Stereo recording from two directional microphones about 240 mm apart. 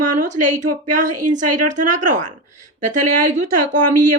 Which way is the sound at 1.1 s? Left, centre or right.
Right.